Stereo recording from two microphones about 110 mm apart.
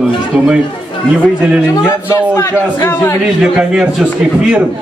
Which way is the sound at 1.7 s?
30° left (ahead or behind).